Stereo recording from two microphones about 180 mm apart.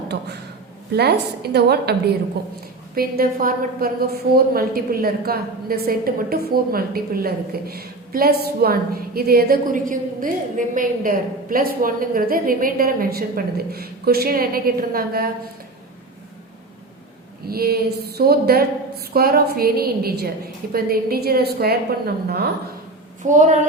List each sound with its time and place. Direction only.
0.1 s a woman's voice: 65° right (ahead or behind)
17.5 s a woman's voice: 60° right (ahead or behind)
23.2 s a woman's voice: 45° right (ahead or behind)